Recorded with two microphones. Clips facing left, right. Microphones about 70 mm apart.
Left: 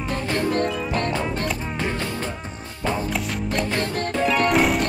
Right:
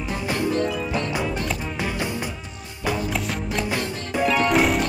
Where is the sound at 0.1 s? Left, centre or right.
Centre.